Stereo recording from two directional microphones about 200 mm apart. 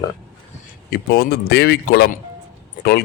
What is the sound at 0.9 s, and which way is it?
Speech, 50° left (ahead or behind).